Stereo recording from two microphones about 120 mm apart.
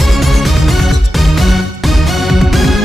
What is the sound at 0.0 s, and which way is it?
Music, centre (ahead or behind).